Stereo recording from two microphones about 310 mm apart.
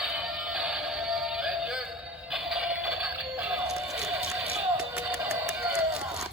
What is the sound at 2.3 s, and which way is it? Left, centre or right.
Music, centre.